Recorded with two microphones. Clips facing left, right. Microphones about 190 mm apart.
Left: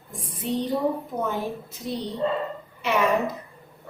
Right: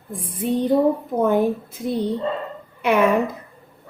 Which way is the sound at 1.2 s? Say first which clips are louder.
Right 13 dB; 55° right (ahead or behind).